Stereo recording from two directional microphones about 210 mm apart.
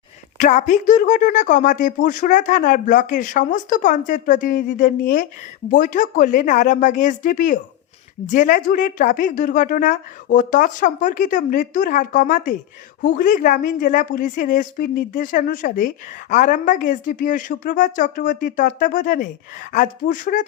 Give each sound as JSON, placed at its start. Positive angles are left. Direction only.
{"t": 0.3, "sound": "speech", "side_deg": 35}